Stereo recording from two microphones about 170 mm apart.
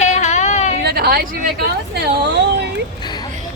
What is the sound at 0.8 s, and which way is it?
Speech, 70° right (ahead or behind).